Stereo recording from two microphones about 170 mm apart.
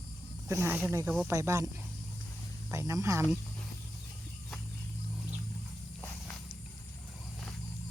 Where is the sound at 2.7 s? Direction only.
15° right (ahead or behind).